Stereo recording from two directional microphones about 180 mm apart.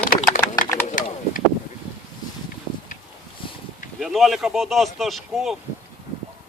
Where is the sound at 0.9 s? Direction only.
45° left (ahead or behind).